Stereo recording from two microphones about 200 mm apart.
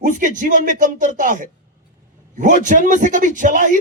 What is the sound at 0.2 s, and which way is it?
A man's voice, 40° right (ahead or behind).